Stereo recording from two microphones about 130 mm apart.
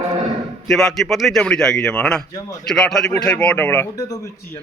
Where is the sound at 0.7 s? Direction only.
5° left (ahead or behind).